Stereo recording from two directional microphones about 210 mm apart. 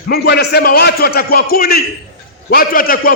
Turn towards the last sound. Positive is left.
turn(degrees=45)  # may be behind; listen again after turning